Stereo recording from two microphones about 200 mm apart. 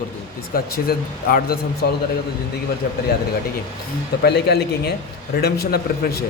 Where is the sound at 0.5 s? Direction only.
45° left (ahead or behind).